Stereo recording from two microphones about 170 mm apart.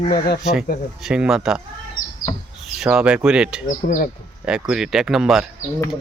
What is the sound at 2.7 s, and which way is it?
Speech, 5° right (ahead or behind).